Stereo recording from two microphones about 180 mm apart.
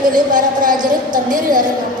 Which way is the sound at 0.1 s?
50° right (ahead or behind).